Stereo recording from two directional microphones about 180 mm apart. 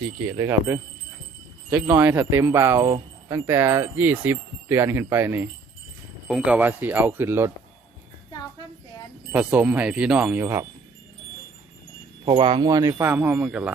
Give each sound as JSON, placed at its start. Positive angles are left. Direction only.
{"t": 0.3, "sound": "speech", "side_deg": -15}
{"t": 9.3, "sound": "speech", "side_deg": -10}
{"t": 12.2, "sound": "speech", "side_deg": -25}